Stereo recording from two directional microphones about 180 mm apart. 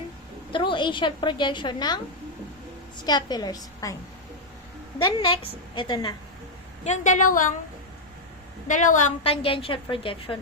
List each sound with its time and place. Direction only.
0.5 s a woman's voice: 25° left (ahead or behind)
3.1 s a woman's voice: 25° left (ahead or behind)
4.9 s a woman's voice: 25° left (ahead or behind)
6.8 s a woman's voice: 40° left (ahead or behind)
8.6 s a woman's voice: 45° left (ahead or behind); by 10.3 s 30° left (ahead or behind)